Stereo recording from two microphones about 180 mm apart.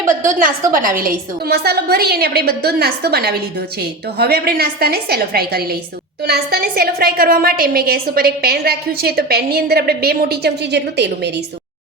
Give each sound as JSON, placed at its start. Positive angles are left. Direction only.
{"t": 0.0, "sound": "a woman's voice", "side_deg": -45}